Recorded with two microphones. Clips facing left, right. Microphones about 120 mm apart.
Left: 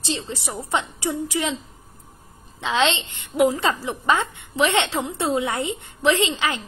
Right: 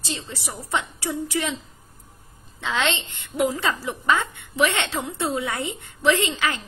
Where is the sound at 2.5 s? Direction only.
20° left (ahead or behind).